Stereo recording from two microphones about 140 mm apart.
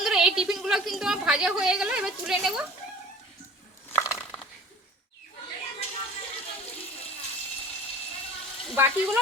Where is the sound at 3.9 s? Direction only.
20° left (ahead or behind).